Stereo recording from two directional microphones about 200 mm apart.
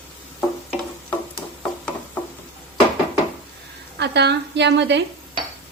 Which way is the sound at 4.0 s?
55° right (ahead or behind).